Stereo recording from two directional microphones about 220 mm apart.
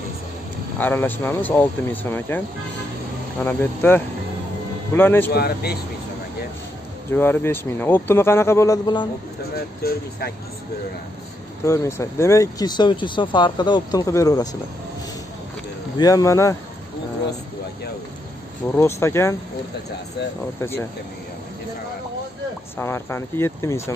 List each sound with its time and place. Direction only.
0.7 s speech: 10° left (ahead or behind)
3.4 s speech: 10° left (ahead or behind)
5.3 s speech: 45° left (ahead or behind)
7.1 s speech: 10° left (ahead or behind)
9.8 s speech: 45° left (ahead or behind)
11.6 s speech: 15° left (ahead or behind)
16.0 s speech: 15° left (ahead or behind)
18.8 s speech: 10° left (ahead or behind)
22.8 s speech: 10° left (ahead or behind)